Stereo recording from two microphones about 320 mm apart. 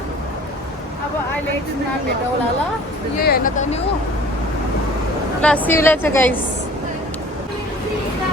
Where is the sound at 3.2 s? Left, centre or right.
Left.